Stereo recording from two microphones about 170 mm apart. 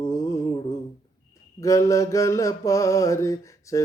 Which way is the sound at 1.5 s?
20° left (ahead or behind).